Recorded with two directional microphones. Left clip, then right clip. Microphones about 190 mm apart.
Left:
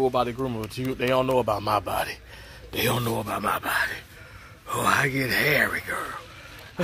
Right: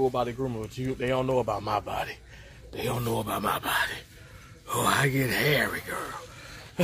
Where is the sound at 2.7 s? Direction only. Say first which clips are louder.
Left 6 dB; 75° left (ahead or behind).